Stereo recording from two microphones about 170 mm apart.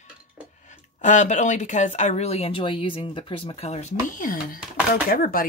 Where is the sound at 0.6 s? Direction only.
45° left (ahead or behind).